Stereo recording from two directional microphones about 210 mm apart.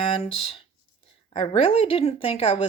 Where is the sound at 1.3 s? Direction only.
25° left (ahead or behind).